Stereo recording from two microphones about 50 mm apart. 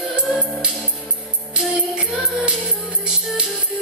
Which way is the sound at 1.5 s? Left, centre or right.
Right.